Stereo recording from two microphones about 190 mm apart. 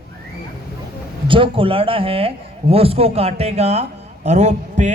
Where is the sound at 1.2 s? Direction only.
25° right (ahead or behind).